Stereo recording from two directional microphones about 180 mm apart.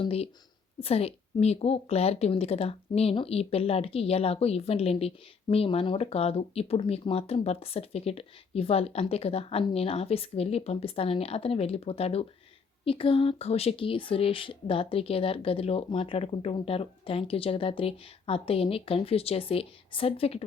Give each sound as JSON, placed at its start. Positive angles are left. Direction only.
{"t": 0.0, "sound": "a woman's voice", "side_deg": 35}